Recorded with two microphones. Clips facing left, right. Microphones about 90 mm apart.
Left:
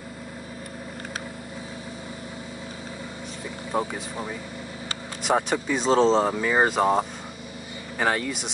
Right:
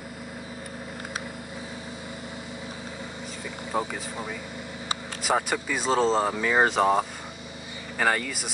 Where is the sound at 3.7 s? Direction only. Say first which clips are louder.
Left 2 dB; 5° left (ahead or behind).